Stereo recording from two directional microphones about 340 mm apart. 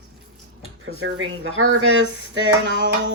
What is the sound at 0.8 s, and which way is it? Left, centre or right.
Speech, right.